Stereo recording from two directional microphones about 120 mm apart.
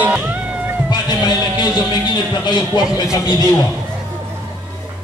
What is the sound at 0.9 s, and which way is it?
A man's voice, 35° left (ahead or behind).